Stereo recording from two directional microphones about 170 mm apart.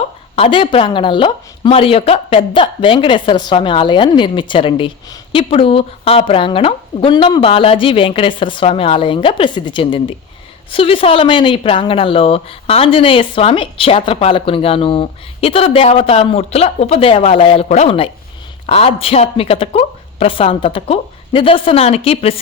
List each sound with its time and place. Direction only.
0.3 s speech: 30° left (ahead or behind)